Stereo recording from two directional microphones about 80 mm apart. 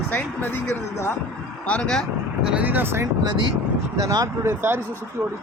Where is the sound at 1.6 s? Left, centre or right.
Centre.